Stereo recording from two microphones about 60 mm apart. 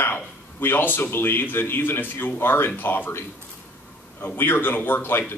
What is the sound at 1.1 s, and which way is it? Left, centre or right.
A man's voice, left.